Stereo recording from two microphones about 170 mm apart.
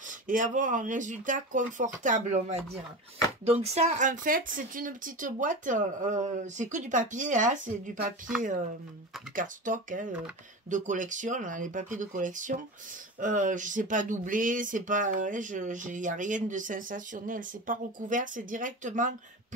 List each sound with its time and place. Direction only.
0.3 s speech: 50° right (ahead or behind)